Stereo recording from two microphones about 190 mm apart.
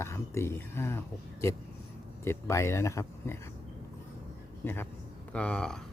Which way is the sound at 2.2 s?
15° left (ahead or behind).